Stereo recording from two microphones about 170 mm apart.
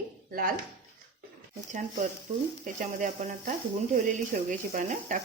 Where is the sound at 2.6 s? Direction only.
50° right (ahead or behind).